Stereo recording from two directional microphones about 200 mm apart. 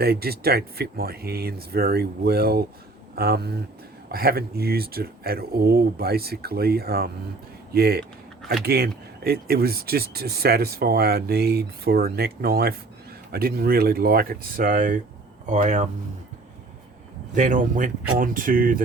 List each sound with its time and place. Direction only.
0.0 s speech: 50° right (ahead or behind)
17.3 s speech: 40° right (ahead or behind)